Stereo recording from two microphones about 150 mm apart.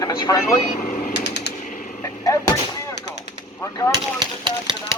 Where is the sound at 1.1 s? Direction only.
90° left.